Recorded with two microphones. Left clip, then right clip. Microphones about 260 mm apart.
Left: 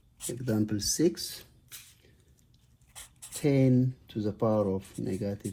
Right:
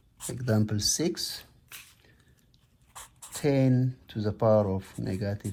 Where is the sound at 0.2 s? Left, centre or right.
Right.